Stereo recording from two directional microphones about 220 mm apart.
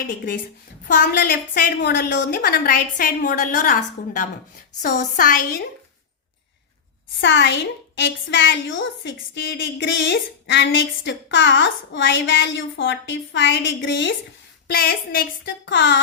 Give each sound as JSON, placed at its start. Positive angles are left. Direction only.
{"t": 0.9, "sound": "a woman's voice", "side_deg": 40}
{"t": 7.2, "sound": "a woman's voice", "side_deg": 55}
{"t": 14.7, "sound": "speech", "side_deg": 45}